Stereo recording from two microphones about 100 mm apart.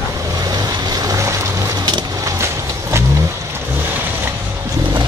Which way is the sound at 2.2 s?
30° right (ahead or behind).